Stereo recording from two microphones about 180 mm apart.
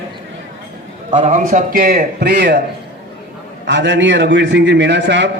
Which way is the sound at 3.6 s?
80° right.